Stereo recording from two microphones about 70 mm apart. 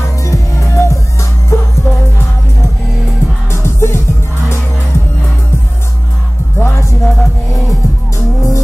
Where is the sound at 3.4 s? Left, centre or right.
Left.